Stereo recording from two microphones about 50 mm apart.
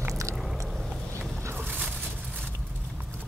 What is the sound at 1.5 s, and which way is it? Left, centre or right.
Boat, right.